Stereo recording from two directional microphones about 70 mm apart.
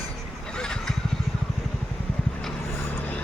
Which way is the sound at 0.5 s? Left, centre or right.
Centre.